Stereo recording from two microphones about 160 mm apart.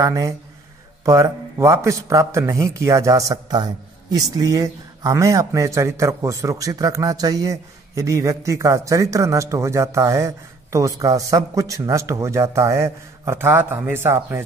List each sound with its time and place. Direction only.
0.0 s a man's voice: 20° right (ahead or behind)